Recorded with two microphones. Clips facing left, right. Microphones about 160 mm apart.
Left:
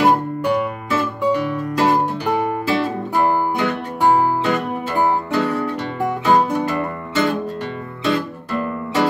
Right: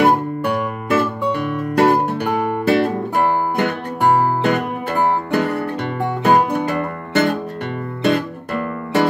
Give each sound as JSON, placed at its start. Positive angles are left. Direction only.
{"t": 0.0, "sound": "music", "side_deg": -55}